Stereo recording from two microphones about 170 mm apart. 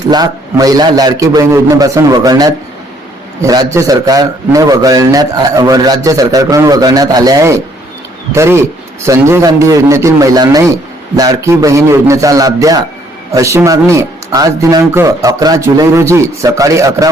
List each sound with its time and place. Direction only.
0.1 s a man's voice: 20° right (ahead or behind)